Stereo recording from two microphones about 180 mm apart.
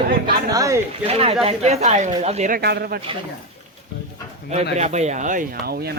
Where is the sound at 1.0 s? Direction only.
35° right (ahead or behind).